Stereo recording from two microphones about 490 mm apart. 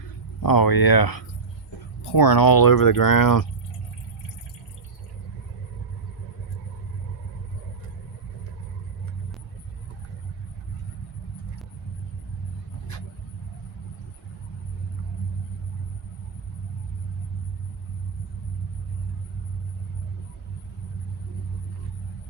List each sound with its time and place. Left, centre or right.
0.4 s speech: left